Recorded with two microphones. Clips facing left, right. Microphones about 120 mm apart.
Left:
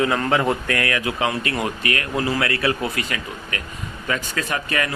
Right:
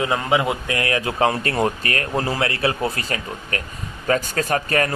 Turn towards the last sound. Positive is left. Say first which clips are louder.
# right 4 dB
turn(degrees=-40)  # may be behind; listen again after turning